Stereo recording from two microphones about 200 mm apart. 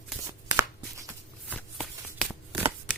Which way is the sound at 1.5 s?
5° left (ahead or behind).